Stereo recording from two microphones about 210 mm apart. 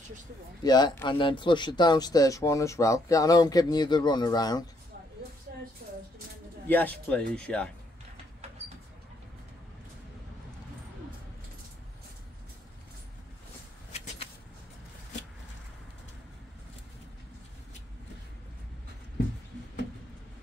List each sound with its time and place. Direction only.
0.7 s speech: 20° left (ahead or behind)
6.7 s speech: 10° left (ahead or behind)